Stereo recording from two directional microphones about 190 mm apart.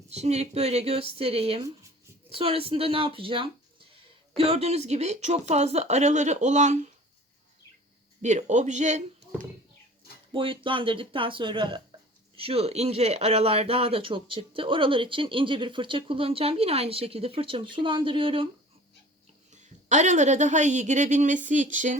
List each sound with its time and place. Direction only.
0.1 s speech: 35° right (ahead or behind)
8.2 s speech: 40° right (ahead or behind)
10.3 s speech: 25° right (ahead or behind)
19.5 s speech: 40° right (ahead or behind)